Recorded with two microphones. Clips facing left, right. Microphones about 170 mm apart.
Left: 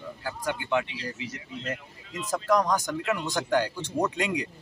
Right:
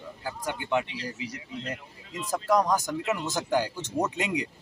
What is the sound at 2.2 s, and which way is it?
Speech, centre (ahead or behind).